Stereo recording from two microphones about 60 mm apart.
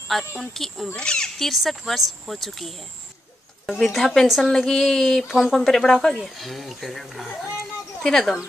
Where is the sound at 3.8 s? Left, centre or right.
Centre.